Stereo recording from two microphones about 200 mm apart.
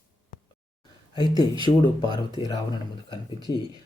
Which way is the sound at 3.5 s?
20° left (ahead or behind).